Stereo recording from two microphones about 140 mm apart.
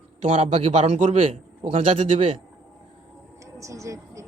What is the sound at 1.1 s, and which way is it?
A man's voice, 45° right (ahead or behind).